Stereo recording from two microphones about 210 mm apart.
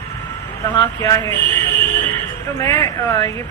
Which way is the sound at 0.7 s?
15° left (ahead or behind).